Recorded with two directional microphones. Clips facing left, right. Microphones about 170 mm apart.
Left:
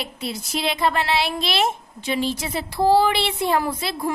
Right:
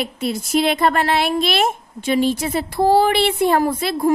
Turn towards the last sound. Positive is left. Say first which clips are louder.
# right 8 dB
turn(degrees=-50)  # may be behind; listen again after turning